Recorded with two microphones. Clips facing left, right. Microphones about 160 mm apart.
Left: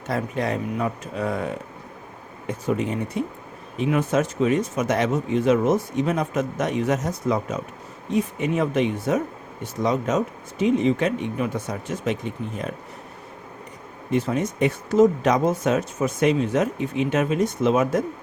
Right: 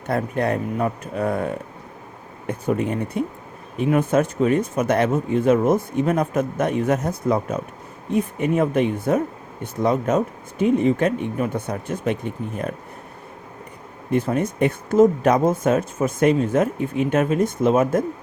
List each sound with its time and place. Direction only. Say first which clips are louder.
0.1 s speech: right 3 dB; 55° right (ahead or behind)
2.5 s speech: right 2 dB; 55° right (ahead or behind)
14.1 s speech: right 2 dB; 55° right (ahead or behind)